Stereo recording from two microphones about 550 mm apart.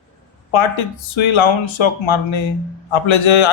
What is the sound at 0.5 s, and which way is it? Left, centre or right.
A man's voice, left.